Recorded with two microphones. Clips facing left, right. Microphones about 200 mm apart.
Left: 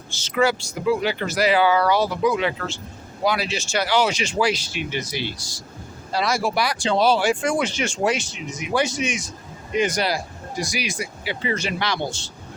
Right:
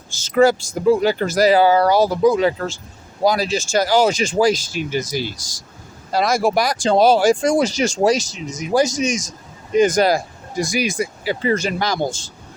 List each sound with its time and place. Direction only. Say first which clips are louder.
0.3 s speech: right 6 dB; 45° right (ahead or behind)